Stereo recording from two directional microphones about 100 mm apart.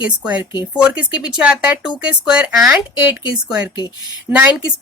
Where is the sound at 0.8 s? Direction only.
10° right (ahead or behind).